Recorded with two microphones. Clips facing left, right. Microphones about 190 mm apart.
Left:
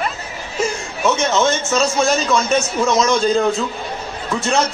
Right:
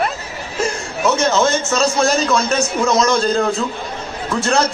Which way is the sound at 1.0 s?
Centre (ahead or behind).